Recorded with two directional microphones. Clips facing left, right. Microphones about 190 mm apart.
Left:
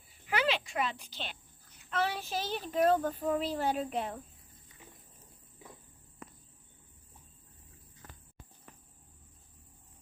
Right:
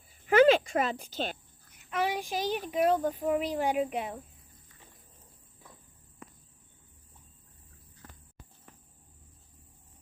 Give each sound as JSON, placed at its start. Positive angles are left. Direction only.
{"t": 0.3, "sound": "speech", "side_deg": -45}
{"t": 1.7, "sound": "a child's voice", "side_deg": -15}